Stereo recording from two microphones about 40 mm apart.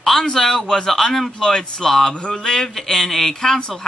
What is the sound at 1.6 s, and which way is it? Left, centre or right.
Speech, centre.